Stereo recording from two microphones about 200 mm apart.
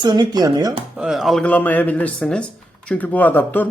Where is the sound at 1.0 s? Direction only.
Centre (ahead or behind).